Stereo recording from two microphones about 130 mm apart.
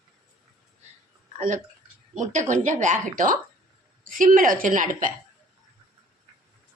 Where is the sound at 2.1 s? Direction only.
70° right (ahead or behind).